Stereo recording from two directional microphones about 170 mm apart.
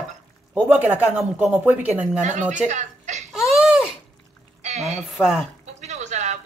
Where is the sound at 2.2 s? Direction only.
45° right (ahead or behind).